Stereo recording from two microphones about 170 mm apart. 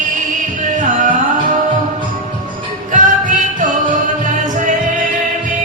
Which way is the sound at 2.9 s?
50° right (ahead or behind).